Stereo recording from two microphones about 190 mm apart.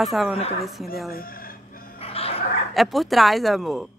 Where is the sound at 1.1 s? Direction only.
50° left (ahead or behind).